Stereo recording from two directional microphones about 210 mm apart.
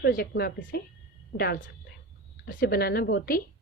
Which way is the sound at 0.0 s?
50° left (ahead or behind).